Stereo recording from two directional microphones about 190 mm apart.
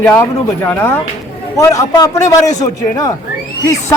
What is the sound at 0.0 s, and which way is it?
Speech, 10° left (ahead or behind).